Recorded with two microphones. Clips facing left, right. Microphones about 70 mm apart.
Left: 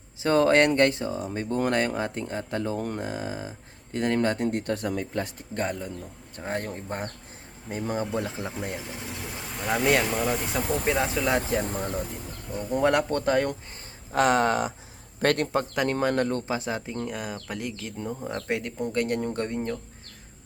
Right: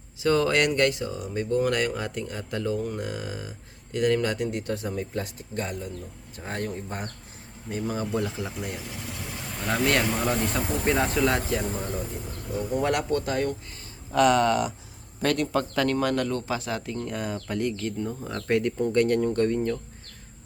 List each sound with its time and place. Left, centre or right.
0.2 s speech: left
2.7 s speech: left
3.0 s speech: left
4.4 s speech: left
5.2 s speech: left
6.4 s speech: left
9.6 s speech: centre
11.5 s speech: left
12.8 s speech: left
14.1 s speech: left
15.2 s speech: left
15.5 s speech: left
17.1 s speech: centre